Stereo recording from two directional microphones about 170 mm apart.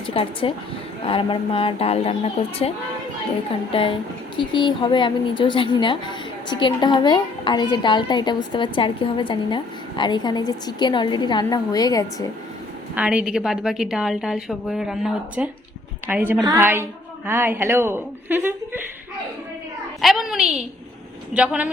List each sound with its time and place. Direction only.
0.1 s a woman's voice: 30° left (ahead or behind)
13.0 s a woman's voice: 5° right (ahead or behind)
20.0 s a woman's voice: centre (ahead or behind)